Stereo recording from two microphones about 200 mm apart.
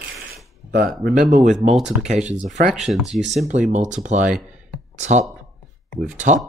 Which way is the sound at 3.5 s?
35° right (ahead or behind).